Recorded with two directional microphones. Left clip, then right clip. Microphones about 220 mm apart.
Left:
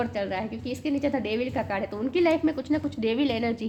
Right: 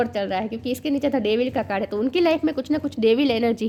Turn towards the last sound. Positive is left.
turn(degrees=-45)  # may be behind; listen again after turning